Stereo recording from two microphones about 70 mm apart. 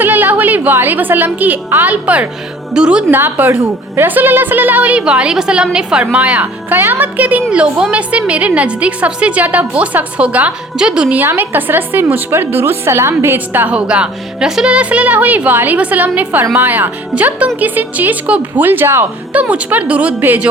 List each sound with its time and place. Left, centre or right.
0.0 s a woman's voice: right
3.1 s a woman's voice: right; by 11.2 s centre
11.2 s a woman's voice: right
13.7 s a woman's voice: centre; by 19.0 s right
19.3 s a woman's voice: right